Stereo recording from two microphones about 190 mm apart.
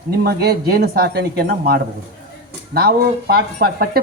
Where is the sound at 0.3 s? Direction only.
55° right (ahead or behind).